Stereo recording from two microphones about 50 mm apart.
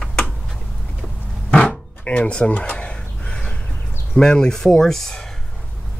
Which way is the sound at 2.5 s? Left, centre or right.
Left.